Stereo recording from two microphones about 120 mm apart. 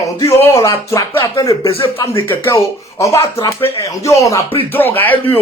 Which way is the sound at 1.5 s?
45° left (ahead or behind).